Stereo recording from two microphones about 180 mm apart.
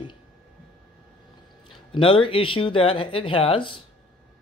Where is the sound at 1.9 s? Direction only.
30° left (ahead or behind).